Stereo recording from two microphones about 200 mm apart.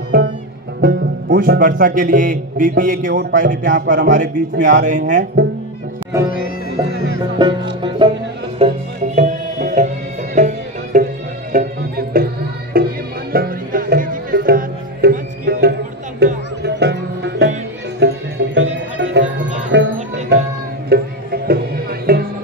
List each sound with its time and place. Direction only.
0.1 s music: 45° right (ahead or behind)
0.7 s speech: 50° right (ahead or behind)
3.1 s speech: 60° right (ahead or behind)
3.3 s speech: 40° right (ahead or behind)
6.1 s music: 15° right (ahead or behind)
7.2 s speech: 20° right (ahead or behind)
8.5 s music: 30° right (ahead or behind); by 19.9 s 60° right (ahead or behind)
20.9 s music: 50° right (ahead or behind)